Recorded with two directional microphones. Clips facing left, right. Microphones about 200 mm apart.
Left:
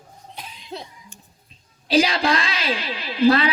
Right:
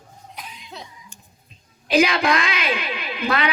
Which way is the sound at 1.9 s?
30° left (ahead or behind).